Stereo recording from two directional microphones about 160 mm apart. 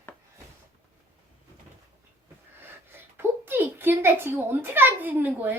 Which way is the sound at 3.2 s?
15° right (ahead or behind).